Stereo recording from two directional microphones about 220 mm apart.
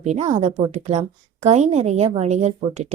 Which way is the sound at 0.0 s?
30° right (ahead or behind).